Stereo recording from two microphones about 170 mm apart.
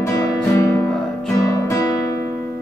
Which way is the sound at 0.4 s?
15° left (ahead or behind).